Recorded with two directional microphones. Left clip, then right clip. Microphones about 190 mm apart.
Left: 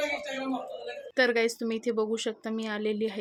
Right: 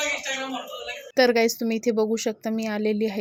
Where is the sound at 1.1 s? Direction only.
20° right (ahead or behind).